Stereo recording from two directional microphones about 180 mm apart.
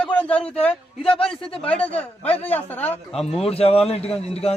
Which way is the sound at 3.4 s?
35° left (ahead or behind).